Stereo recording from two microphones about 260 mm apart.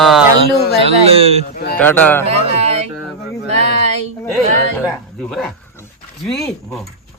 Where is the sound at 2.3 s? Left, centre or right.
Right.